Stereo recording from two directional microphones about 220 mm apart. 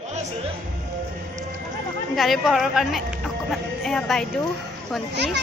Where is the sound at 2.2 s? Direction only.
Centre (ahead or behind).